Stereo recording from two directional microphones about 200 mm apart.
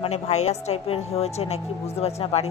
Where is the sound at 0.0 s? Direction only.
35° left (ahead or behind).